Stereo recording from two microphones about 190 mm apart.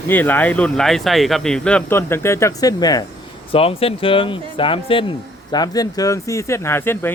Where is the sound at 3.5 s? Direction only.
30° left (ahead or behind); by 7.1 s 10° left (ahead or behind).